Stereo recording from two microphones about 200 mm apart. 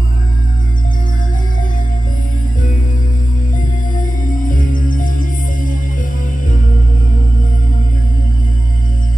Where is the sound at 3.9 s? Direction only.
40° left (ahead or behind).